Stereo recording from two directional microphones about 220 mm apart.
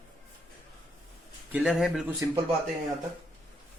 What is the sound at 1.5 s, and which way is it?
Speech, centre (ahead or behind).